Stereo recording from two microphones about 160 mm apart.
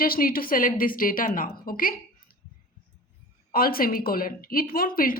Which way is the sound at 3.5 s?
65° left (ahead or behind).